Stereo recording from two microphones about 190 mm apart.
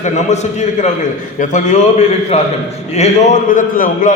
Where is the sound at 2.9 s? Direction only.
35° left (ahead or behind).